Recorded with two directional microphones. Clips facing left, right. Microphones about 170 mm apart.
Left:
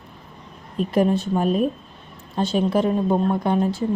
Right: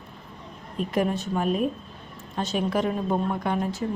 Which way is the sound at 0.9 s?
30° left (ahead or behind).